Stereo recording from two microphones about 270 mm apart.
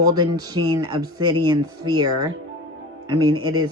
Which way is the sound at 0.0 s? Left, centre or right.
Centre.